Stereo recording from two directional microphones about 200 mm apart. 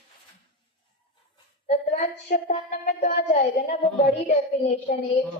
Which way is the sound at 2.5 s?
35° left (ahead or behind).